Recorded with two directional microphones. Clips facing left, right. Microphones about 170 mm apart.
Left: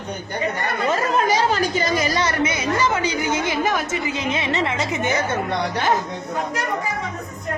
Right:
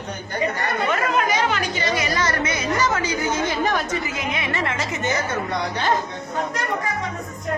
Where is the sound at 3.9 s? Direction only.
25° left (ahead or behind).